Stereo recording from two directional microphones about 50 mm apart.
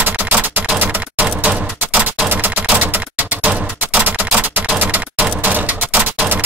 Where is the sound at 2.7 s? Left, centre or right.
Right.